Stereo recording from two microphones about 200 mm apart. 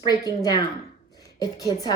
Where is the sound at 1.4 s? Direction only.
20° left (ahead or behind).